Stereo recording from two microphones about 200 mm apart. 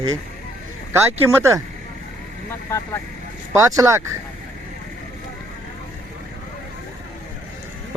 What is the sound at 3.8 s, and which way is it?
Speech, 15° right (ahead or behind).